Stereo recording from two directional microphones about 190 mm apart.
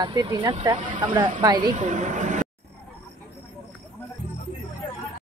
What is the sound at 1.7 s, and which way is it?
Speech, 40° right (ahead or behind).